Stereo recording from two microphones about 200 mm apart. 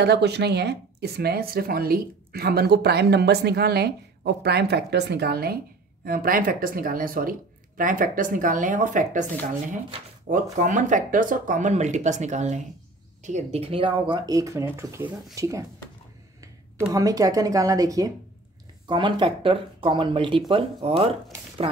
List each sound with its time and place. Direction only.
0.0 s speech: 55° right (ahead or behind); by 9.2 s 40° right (ahead or behind)
10.2 s a woman's voice: 40° right (ahead or behind); by 15.6 s 15° right (ahead or behind)
16.8 s a woman's voice: 15° right (ahead or behind)